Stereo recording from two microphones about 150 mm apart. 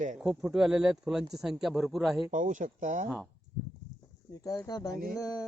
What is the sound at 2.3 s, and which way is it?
Speech, 60° right (ahead or behind).